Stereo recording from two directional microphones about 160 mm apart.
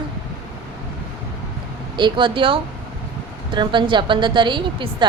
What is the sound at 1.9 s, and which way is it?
A woman's voice, 30° right (ahead or behind).